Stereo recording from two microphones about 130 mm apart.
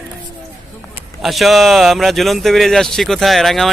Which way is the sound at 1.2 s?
Centre (ahead or behind).